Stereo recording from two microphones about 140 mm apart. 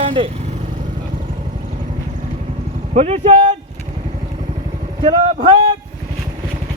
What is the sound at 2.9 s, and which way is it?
Speech, 50° right (ahead or behind).